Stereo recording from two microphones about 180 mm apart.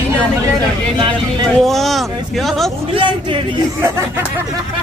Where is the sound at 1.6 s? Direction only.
Centre (ahead or behind).